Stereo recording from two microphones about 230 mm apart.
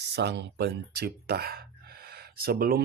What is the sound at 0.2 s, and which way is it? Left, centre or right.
Speech, right.